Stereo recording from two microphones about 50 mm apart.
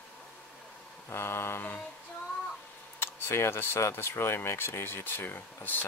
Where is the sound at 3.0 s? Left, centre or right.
Left.